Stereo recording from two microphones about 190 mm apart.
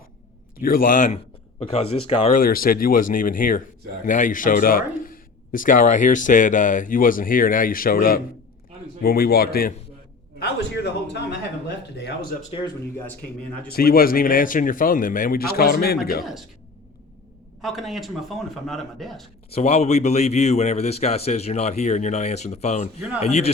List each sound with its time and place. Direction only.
0.6 s a man's voice: 50° left (ahead or behind)
2.4 s a man's voice: 50° left (ahead or behind)
10.8 s speech: 65° left (ahead or behind)
12.5 s speech: 25° left (ahead or behind)
13.7 s a man's voice: 50° left (ahead or behind)
17.6 s speech: centre (ahead or behind)
19.5 s a man's voice: 35° left (ahead or behind)